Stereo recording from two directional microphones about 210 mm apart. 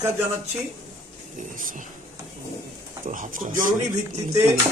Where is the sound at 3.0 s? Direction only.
40° right (ahead or behind).